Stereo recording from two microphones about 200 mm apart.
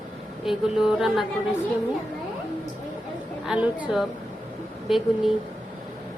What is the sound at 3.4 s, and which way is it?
Music, 5° right (ahead or behind).